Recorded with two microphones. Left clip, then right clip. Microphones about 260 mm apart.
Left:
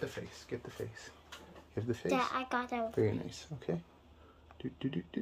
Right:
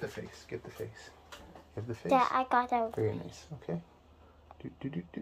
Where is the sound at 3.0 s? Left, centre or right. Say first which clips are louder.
Even; left.